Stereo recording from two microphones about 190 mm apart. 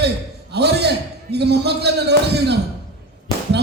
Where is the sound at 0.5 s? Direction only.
60° right (ahead or behind).